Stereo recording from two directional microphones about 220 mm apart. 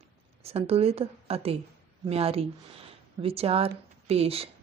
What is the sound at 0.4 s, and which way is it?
A woman's voice, 25° right (ahead or behind).